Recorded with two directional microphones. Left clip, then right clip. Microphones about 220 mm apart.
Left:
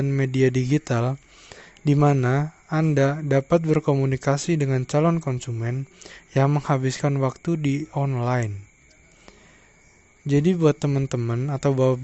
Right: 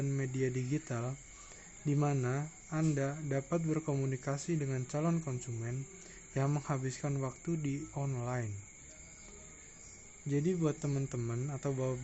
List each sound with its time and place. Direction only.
0.0 s speech: 45° left (ahead or behind)
10.2 s speech: 50° left (ahead or behind)